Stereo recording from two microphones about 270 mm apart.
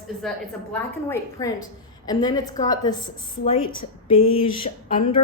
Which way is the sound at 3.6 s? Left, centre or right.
Left.